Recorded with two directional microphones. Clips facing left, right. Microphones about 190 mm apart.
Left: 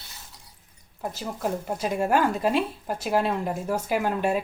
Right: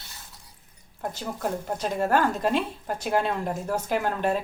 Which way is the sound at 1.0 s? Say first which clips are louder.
Left 1 dB; 5° left (ahead or behind).